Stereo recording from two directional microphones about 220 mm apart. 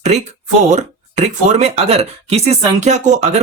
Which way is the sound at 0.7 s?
30° right (ahead or behind).